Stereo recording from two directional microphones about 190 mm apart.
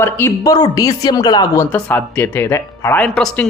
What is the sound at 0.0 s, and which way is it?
Speech, 15° left (ahead or behind).